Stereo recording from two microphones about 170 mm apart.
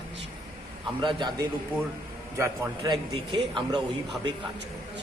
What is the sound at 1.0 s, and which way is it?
A man's voice, 25° right (ahead or behind).